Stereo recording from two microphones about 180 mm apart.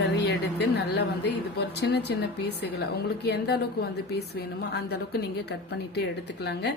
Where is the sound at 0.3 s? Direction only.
70° left (ahead or behind).